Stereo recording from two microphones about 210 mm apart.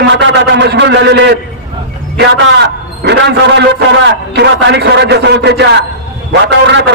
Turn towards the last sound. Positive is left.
turn(degrees=-55)  # may be behind; listen again after turning